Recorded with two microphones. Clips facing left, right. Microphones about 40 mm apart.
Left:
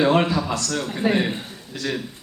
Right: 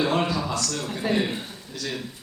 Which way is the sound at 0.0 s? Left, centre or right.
Left.